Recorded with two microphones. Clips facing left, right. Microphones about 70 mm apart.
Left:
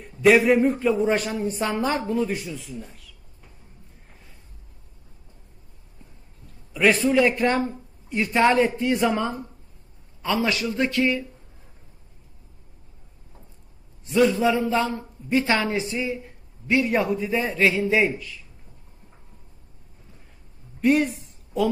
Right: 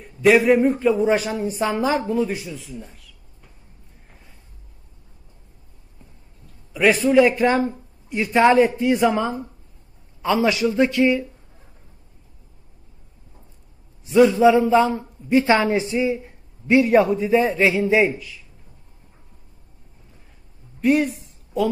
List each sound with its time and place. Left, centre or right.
0.0 s speech: centre
6.7 s speech: centre
10.2 s a woman's voice: centre
14.2 s a woman's voice: centre
14.4 s a woman's voice: centre
17.6 s a man's voice: right
20.8 s speech: centre